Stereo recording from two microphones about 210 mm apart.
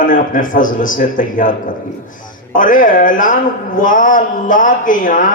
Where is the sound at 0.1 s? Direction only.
40° left (ahead or behind).